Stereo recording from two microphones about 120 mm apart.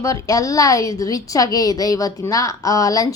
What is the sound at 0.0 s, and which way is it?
A woman's voice, 30° left (ahead or behind).